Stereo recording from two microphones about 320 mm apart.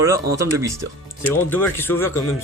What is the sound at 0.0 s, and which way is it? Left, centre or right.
Speech, centre.